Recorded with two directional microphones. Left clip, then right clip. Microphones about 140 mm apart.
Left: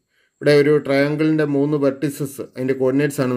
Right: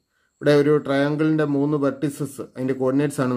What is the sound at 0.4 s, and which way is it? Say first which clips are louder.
Speech: left 3 dB; 15° left (ahead or behind).